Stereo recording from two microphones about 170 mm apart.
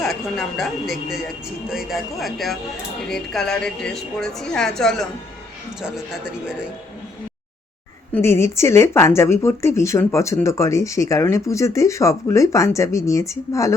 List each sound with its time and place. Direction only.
0.0 s a woman's voice: centre (ahead or behind)
8.1 s speech: 15° left (ahead or behind)